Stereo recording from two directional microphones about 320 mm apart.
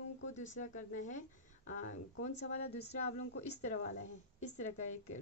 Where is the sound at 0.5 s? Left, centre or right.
Left.